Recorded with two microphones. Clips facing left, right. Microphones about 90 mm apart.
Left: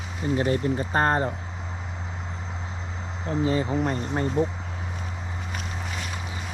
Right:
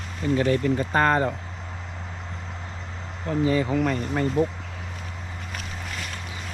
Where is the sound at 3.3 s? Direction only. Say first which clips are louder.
Right 2 dB; 25° left (ahead or behind).